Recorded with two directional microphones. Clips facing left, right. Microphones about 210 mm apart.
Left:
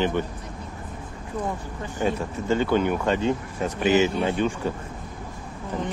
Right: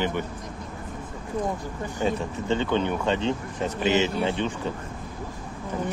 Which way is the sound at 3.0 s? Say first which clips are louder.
Left 2 dB; 25° right (ahead or behind).